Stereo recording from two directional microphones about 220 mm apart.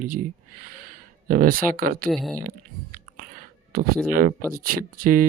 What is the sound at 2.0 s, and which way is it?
Speech, centre (ahead or behind).